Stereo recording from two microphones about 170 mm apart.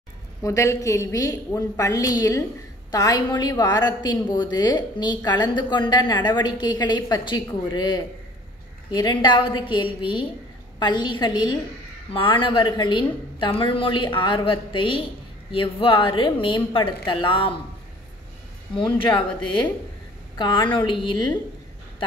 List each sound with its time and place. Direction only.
0.4 s a woman's voice: 20° left (ahead or behind)
18.9 s a woman's voice: 30° left (ahead or behind)